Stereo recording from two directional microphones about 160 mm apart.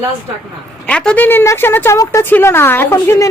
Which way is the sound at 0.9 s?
5° left (ahead or behind).